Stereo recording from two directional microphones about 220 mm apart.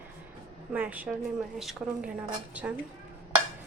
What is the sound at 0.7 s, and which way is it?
Speech, 5° right (ahead or behind).